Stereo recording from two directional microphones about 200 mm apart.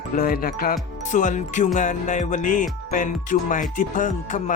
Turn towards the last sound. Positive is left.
turn(degrees=40)  # may be behind; listen again after turning